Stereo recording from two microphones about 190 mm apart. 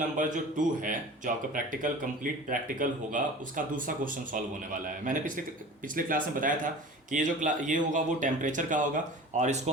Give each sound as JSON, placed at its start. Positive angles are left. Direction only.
{"t": 0.2, "sound": "speech", "side_deg": -45}